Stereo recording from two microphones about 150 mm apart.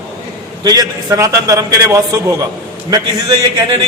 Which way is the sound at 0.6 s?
25° right (ahead or behind).